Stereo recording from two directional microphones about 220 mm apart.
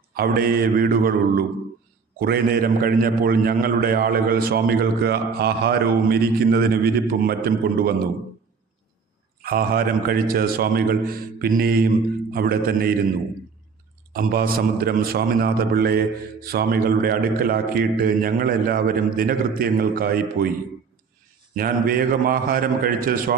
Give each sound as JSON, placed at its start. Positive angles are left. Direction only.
{"t": 0.1, "sound": "a man's voice", "side_deg": -40}
{"t": 9.4, "sound": "a man's voice", "side_deg": -45}
{"t": 14.1, "sound": "a man's voice", "side_deg": -40}
{"t": 21.5, "sound": "a man's voice", "side_deg": -40}